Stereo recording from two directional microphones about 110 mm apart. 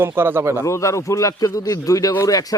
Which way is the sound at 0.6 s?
30° left (ahead or behind).